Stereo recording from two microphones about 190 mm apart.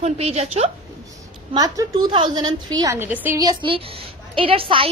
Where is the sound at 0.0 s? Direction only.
35° right (ahead or behind).